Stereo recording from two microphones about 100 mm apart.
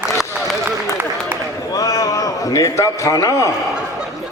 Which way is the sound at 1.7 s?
35° left (ahead or behind).